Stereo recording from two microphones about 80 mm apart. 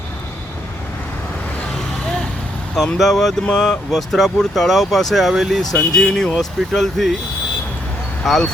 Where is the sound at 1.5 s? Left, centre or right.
Centre.